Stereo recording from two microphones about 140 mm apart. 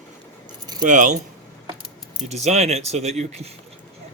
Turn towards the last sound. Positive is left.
turn(degrees=-50)  # may be behind; listen again after turning